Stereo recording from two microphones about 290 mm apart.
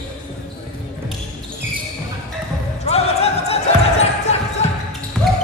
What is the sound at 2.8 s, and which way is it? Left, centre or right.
Basketball bounce, left.